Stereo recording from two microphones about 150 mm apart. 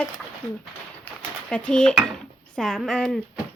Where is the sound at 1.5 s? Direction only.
5° left (ahead or behind).